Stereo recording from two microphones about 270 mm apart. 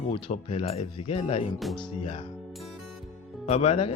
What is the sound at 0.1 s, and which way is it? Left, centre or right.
Speech, left.